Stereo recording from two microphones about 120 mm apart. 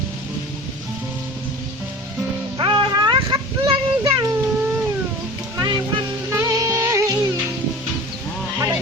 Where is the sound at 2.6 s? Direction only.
45° right (ahead or behind).